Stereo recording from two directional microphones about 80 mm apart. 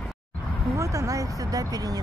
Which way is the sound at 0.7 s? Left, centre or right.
Right.